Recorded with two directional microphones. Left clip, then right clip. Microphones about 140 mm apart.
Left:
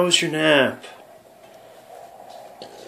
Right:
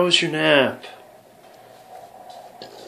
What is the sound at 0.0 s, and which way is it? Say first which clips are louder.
Speech: even; 5° left (ahead or behind).